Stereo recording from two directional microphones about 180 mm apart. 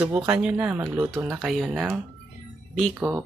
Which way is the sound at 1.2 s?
Centre (ahead or behind).